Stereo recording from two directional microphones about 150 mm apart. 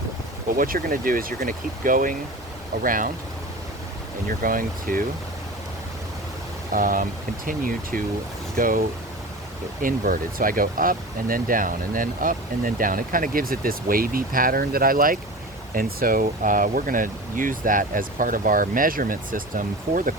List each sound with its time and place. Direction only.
0.5 s speech: 70° right (ahead or behind)
4.3 s speech: 70° right (ahead or behind)
6.7 s speech: 70° right (ahead or behind)
9.8 s speech: 70° right (ahead or behind)